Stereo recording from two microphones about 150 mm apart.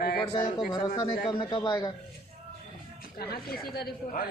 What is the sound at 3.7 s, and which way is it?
Speech, 90° left.